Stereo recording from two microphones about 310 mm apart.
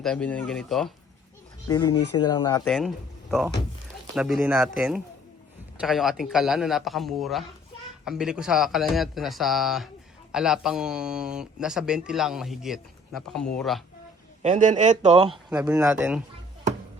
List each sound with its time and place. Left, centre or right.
0.0 s speech: centre
1.6 s speech: centre
2.6 s speech: centre
14.4 s speech: right
15.3 s speech: centre